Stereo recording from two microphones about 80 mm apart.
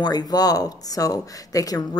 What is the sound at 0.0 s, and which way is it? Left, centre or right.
Speech, left.